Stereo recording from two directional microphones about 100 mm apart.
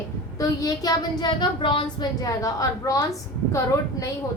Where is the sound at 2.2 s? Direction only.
35° left (ahead or behind).